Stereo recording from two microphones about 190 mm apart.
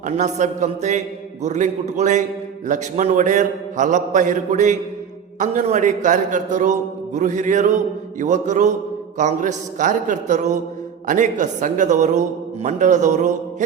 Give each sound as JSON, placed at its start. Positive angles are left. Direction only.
{"t": 0.0, "sound": "a man's voice", "side_deg": -40}